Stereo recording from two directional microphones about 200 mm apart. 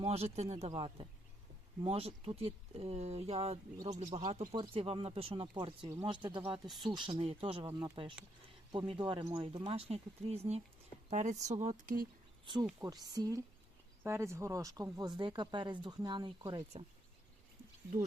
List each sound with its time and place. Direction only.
0.0 s speech: 30° right (ahead or behind)
6.7 s speech: centre (ahead or behind)
6.9 s speech: 25° right (ahead or behind)
12.5 s speech: 25° right (ahead or behind)